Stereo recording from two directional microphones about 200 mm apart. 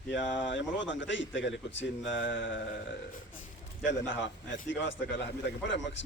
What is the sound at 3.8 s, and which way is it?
A man's voice, 65° left (ahead or behind).